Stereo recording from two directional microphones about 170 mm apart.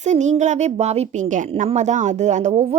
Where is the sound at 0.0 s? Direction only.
45° right (ahead or behind).